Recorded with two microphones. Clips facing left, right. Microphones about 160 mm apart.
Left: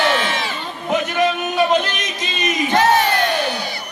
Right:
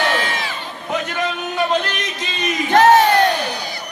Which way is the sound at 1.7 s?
20° left (ahead or behind).